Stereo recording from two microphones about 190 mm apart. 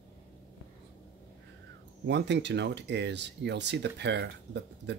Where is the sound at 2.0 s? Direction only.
65° right (ahead or behind).